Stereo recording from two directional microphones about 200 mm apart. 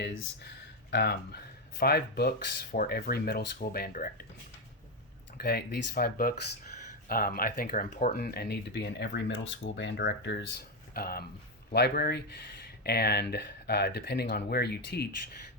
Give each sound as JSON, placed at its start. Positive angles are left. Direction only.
{"t": 0.0, "sound": "speech", "side_deg": 60}
{"t": 5.4, "sound": "speech", "side_deg": 55}